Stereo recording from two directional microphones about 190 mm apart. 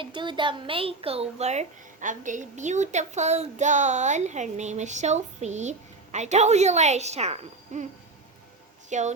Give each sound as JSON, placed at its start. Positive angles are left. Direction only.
{"t": 0.0, "sound": "a child's voice", "side_deg": -25}
{"t": 8.9, "sound": "a woman's voice", "side_deg": -40}